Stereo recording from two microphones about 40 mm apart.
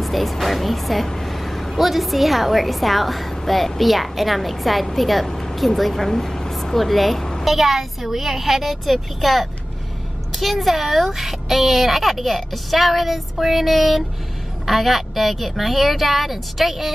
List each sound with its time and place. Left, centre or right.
0.0 s speech: centre